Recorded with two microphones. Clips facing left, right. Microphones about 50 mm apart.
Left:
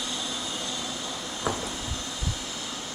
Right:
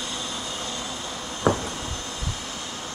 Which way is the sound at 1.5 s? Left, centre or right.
Right.